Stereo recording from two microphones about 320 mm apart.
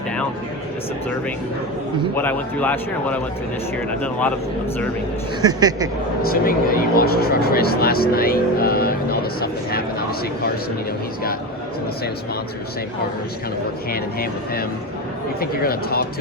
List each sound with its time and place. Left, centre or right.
2.1 s a man's voice: centre
5.5 s speech: centre
6.4 s speech: left
13.9 s speech: left